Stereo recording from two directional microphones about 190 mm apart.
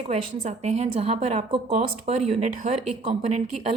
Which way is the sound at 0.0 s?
35° right (ahead or behind).